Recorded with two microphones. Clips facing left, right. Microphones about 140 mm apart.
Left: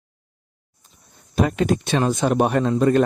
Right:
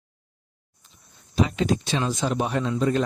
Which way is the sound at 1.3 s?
55° left (ahead or behind).